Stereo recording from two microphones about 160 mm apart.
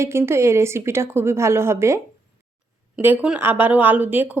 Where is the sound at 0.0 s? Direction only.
15° right (ahead or behind).